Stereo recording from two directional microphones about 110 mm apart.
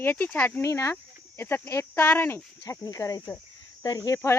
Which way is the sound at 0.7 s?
30° left (ahead or behind).